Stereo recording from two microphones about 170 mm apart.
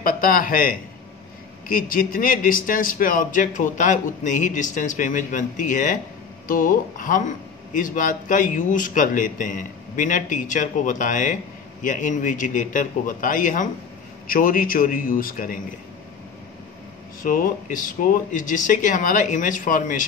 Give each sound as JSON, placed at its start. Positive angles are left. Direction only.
{"t": 0.0, "sound": "a man's voice", "side_deg": 55}
{"t": 17.2, "sound": "speech", "side_deg": 55}